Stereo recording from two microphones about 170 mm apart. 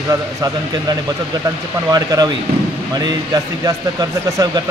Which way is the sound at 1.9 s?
20° right (ahead or behind).